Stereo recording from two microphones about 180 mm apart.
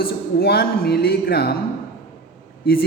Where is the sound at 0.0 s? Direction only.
60° left (ahead or behind).